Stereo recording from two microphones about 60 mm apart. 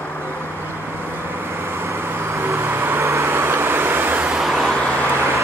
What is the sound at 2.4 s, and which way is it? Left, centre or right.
Vehicle, right.